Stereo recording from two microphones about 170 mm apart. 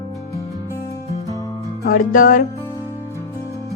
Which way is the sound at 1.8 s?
55° left (ahead or behind).